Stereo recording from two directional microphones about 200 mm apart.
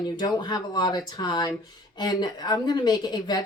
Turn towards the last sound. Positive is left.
turn(degrees=20)  # may be behind; listen again after turning